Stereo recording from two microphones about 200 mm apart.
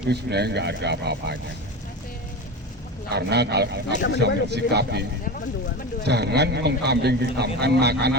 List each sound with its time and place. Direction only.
0.0 s a man's voice: 55° right (ahead or behind)
3.1 s a man's voice: 55° right (ahead or behind)
6.1 s a man's voice: 55° right (ahead or behind)